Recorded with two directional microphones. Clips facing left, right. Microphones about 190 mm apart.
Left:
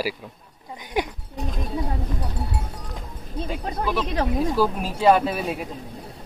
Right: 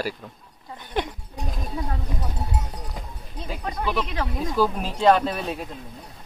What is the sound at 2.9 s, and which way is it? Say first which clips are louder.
Music: left 5 dB; centre (ahead or behind).